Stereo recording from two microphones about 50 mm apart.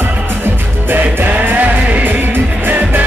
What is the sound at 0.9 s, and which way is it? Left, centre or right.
Music, right.